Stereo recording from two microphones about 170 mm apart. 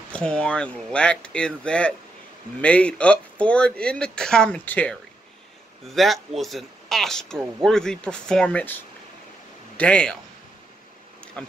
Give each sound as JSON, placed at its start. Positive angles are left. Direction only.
{"t": 0.1, "sound": "speech", "side_deg": 5}
{"t": 11.4, "sound": "speech", "side_deg": 5}